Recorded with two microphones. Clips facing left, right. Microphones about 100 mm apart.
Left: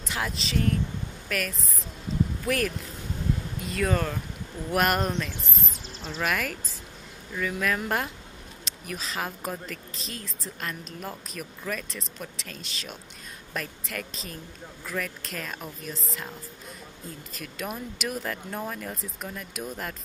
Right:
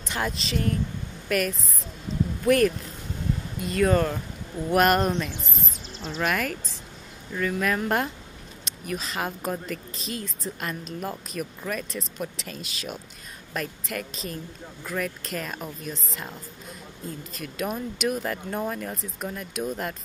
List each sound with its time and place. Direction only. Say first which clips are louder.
0.0 s speech: right 2 dB; centre (ahead or behind)
2.1 s a sound: even; 5° left (ahead or behind)
2.4 s speech: right 7 dB; centre (ahead or behind)
17.3 s speech: right 4 dB; centre (ahead or behind)